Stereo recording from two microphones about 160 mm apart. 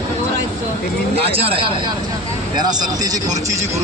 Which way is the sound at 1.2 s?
35° right (ahead or behind).